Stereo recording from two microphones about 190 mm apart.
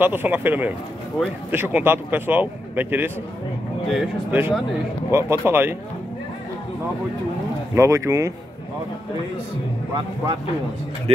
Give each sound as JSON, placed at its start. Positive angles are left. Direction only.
{"t": 0.0, "sound": "speech", "side_deg": -10}
{"t": 7.7, "sound": "speech", "side_deg": -15}